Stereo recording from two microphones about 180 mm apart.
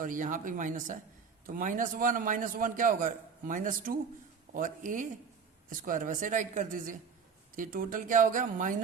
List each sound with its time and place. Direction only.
0.0 s a man's voice: 45° right (ahead or behind)